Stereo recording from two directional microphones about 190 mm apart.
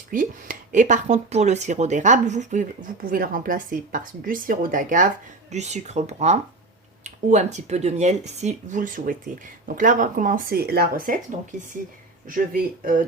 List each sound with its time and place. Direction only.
0.1 s speech: 45° right (ahead or behind)
12.3 s speech: 45° right (ahead or behind)